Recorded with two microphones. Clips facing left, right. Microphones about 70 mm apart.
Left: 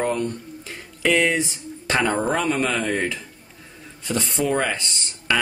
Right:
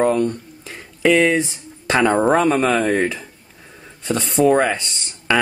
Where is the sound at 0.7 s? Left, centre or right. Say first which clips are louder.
Right 5 dB; right.